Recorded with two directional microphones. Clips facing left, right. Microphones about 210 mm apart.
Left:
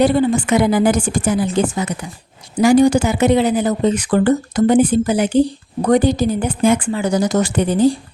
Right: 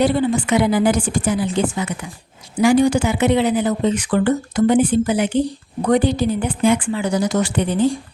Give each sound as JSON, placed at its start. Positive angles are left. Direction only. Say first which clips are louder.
{"t": 0.0, "sound": "a woman's voice", "louder": "left 3 dB", "side_deg": 45}